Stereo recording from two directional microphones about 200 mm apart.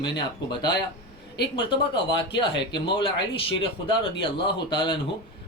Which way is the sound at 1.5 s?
25° left (ahead or behind).